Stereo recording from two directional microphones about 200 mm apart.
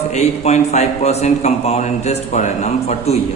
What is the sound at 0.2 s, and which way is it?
A man's voice, 35° left (ahead or behind).